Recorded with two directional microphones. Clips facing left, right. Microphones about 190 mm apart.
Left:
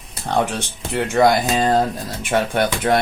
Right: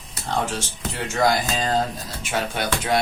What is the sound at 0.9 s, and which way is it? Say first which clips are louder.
Speech: left 6 dB; 60° left (ahead or behind).